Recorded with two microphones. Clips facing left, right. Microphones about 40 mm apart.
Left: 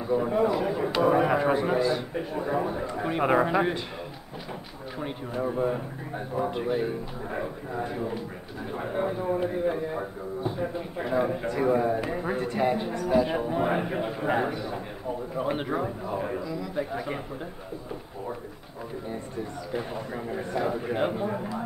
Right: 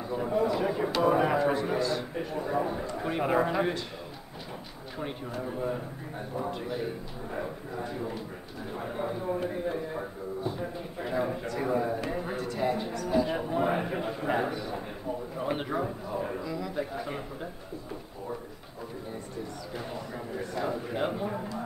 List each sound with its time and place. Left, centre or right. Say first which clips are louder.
0.1 s a man's voice: left 4 dB; centre
0.6 s speech: left 2 dB; centre
1.4 s a man's voice: left 3 dB; centre
5.0 s a man's voice: left 5 dB; centre
12.4 s a man's voice: left 4 dB; left
16.4 s a man's voice: left 2 dB; centre
16.9 s a man's voice: left 3 dB; centre
19.7 s a man's voice: left 7 dB; centre